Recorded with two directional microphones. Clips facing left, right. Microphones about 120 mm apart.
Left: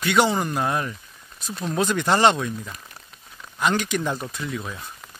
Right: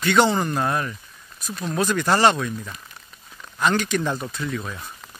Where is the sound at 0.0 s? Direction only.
10° left (ahead or behind).